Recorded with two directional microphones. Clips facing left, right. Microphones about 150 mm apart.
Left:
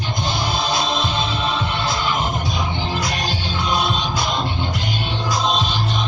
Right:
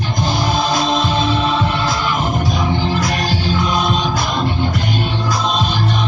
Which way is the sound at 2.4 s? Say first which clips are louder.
Right 6 dB; 45° right (ahead or behind).